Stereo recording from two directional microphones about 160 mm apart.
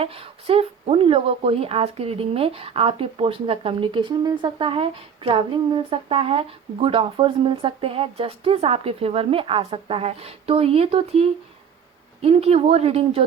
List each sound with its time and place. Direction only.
0.0 s speech: 35° right (ahead or behind)